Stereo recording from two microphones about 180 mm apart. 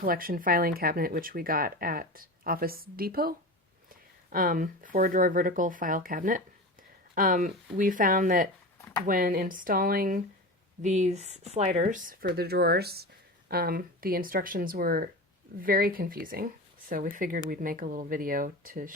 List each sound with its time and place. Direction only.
0.0 s speech: 50° right (ahead or behind)
8.8 s a sound: 20° left (ahead or behind)
9.0 s speech: 50° right (ahead or behind)
10.8 s speech: 40° right (ahead or behind)